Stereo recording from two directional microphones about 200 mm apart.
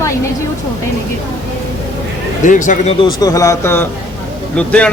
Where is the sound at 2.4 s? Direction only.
40° left (ahead or behind).